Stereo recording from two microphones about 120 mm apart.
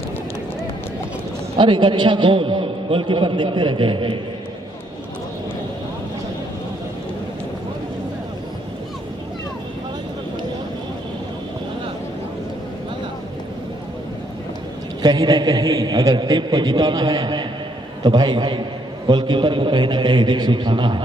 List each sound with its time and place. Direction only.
1.6 s a man's voice: 45° right (ahead or behind)
15.0 s a man's voice: 35° right (ahead or behind)